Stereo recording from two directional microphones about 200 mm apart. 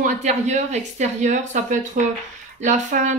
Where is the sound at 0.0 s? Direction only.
35° right (ahead or behind).